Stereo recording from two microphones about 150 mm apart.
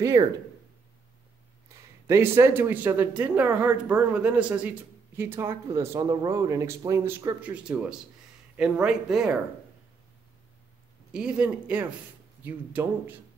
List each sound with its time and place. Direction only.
0.0 s speech: 25° right (ahead or behind)
2.0 s speech: 15° right (ahead or behind)
11.1 s speech: 5° right (ahead or behind)